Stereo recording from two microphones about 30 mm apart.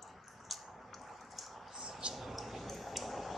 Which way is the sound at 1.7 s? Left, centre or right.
Centre.